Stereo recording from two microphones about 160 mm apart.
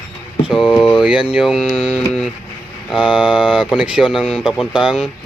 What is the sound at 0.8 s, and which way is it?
Speech, centre (ahead or behind).